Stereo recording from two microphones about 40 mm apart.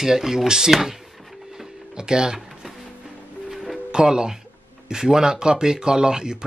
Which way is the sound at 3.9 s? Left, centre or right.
Centre.